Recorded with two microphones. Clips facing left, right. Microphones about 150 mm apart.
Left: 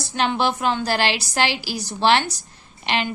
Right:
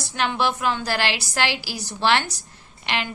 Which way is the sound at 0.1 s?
20° left (ahead or behind).